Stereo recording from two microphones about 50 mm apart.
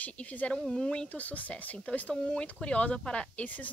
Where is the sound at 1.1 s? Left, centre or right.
Left.